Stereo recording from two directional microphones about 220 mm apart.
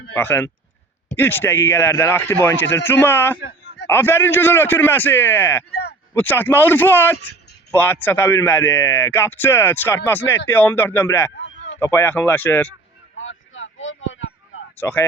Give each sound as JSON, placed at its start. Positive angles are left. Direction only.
{"t": 0.1, "sound": "speech", "side_deg": 10}
{"t": 13.1, "sound": "a sound", "side_deg": 60}
{"t": 14.8, "sound": "speech", "side_deg": 10}